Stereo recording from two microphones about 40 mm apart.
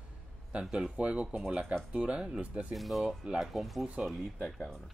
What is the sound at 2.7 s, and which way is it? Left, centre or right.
Speech, centre.